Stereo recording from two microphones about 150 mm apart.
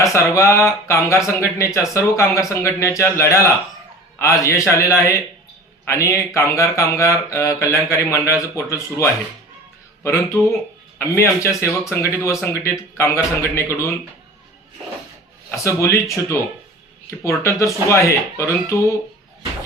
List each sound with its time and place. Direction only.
0.0 s a man's voice: 20° left (ahead or behind)
15.4 s speech: 20° left (ahead or behind)